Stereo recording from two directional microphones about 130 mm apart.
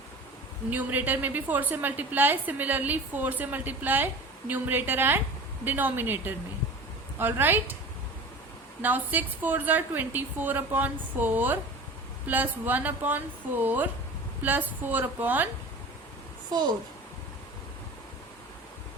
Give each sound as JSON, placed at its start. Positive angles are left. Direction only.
{"t": 0.7, "sound": "a woman's voice", "side_deg": -15}
{"t": 8.8, "sound": "a woman's voice", "side_deg": -15}
{"t": 16.5, "sound": "a woman's voice", "side_deg": -35}